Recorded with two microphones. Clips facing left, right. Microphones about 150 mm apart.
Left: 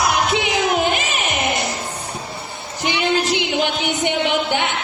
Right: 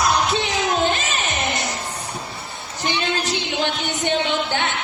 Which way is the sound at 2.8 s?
15° left (ahead or behind).